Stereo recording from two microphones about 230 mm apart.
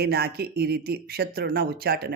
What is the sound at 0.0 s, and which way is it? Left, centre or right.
Speech, right.